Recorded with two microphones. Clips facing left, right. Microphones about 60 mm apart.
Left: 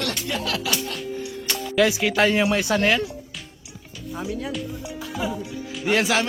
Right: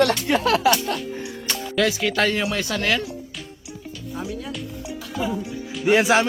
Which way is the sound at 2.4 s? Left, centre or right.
Left.